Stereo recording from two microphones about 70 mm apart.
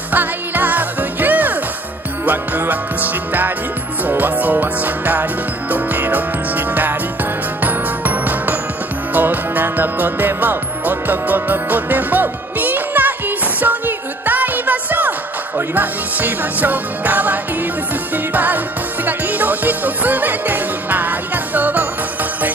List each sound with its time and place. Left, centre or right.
0.1 s music: right